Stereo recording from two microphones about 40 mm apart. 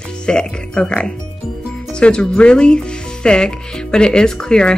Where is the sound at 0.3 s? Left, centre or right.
Left.